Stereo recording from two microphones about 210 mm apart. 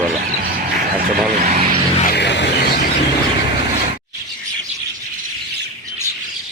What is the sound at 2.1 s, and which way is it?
Music, 55° left (ahead or behind).